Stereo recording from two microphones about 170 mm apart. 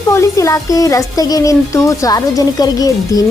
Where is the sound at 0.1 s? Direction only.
15° left (ahead or behind).